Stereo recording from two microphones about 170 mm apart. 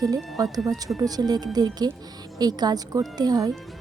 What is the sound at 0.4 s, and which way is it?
Speech, 20° right (ahead or behind).